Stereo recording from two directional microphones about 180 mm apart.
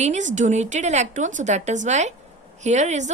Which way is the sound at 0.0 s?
40° right (ahead or behind).